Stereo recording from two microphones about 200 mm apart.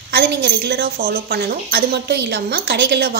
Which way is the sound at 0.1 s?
55° right (ahead or behind).